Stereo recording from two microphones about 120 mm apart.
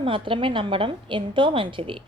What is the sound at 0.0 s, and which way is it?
Speech, 45° right (ahead or behind).